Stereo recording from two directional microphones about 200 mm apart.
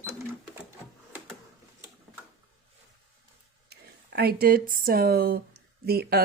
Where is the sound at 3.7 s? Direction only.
55° right (ahead or behind).